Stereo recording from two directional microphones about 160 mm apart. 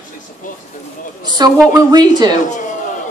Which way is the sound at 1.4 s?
25° right (ahead or behind).